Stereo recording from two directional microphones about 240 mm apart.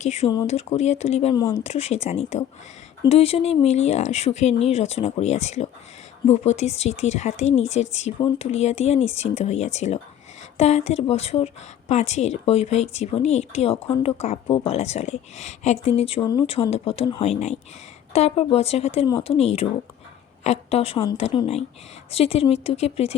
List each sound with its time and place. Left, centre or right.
0.0 s a woman's voice: left
1.6 s a woman's voice: left